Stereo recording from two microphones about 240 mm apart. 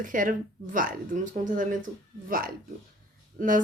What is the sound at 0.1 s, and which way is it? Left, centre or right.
Speech, right.